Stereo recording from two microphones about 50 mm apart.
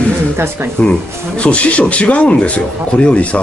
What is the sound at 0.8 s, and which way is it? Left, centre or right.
Speech, left.